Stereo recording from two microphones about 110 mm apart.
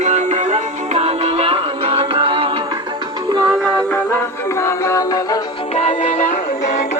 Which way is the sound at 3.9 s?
20° left (ahead or behind).